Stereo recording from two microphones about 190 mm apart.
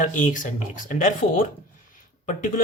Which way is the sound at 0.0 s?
45° left (ahead or behind).